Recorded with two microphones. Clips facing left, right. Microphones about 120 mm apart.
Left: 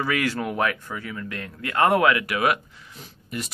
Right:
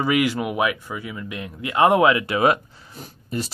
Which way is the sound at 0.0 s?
15° right (ahead or behind).